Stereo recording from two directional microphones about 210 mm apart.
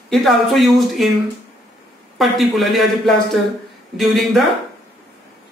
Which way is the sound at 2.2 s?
Centre (ahead or behind).